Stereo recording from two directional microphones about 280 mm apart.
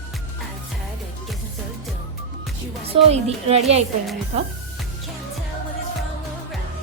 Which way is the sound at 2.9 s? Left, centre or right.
Right.